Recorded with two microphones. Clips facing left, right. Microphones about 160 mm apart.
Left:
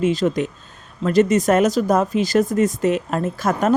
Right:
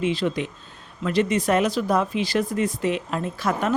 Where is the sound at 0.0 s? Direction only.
45° left (ahead or behind).